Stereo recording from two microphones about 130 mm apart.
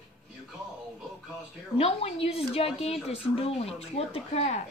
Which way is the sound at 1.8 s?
50° left (ahead or behind).